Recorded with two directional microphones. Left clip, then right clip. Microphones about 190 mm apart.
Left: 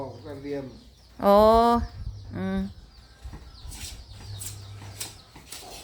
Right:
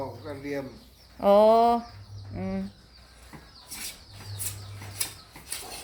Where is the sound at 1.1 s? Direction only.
30° left (ahead or behind).